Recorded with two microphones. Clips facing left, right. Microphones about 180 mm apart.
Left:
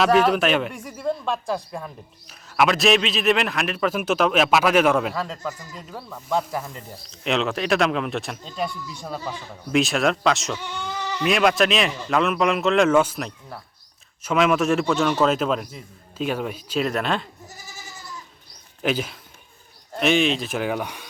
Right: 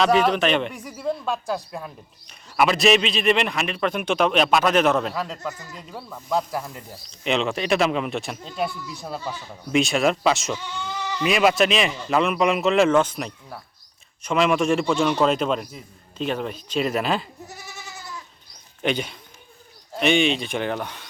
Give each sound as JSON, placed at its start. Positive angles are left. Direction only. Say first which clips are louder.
{"t": 0.0, "sound": "speech", "louder": "left 1 dB", "side_deg": 5}
{"t": 17.4, "sound": "goat", "louder": "right 3 dB", "side_deg": -65}
{"t": 18.8, "sound": "speech", "louder": "even", "side_deg": 5}